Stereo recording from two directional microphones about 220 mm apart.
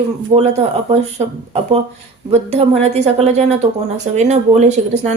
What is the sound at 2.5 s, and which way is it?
A woman's voice, 30° right (ahead or behind).